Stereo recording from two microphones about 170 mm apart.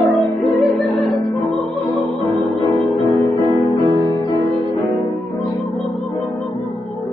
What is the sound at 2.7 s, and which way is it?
Music, 20° left (ahead or behind).